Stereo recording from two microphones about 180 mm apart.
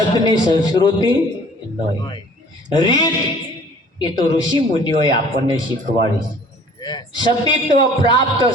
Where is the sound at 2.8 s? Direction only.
20° left (ahead or behind).